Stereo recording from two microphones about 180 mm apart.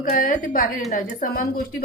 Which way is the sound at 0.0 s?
50° left (ahead or behind).